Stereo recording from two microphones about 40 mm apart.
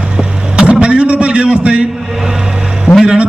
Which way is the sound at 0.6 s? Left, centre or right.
Right.